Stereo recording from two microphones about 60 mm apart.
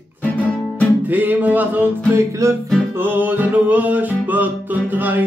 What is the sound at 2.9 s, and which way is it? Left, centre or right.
Music, right.